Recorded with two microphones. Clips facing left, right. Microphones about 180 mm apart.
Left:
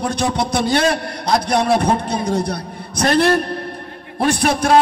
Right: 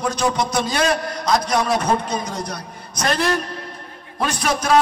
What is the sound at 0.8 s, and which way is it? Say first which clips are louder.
Speech: left 2 dB; 30° left (ahead or behind).